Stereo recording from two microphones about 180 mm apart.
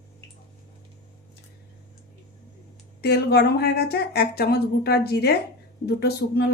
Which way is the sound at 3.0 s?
65° left (ahead or behind).